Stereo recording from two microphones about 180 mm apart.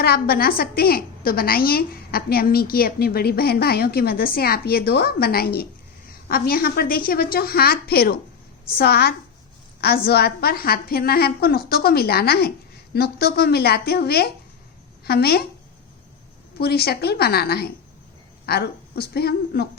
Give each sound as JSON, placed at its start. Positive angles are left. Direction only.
{"t": 0.0, "sound": "a woman's voice", "side_deg": 60}
{"t": 16.6, "sound": "a woman's voice", "side_deg": 60}